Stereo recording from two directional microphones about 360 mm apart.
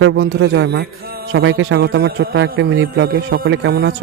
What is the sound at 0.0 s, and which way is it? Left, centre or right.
A man's voice, right.